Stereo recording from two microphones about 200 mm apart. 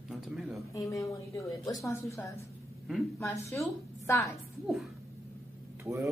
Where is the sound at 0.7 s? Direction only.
15° left (ahead or behind).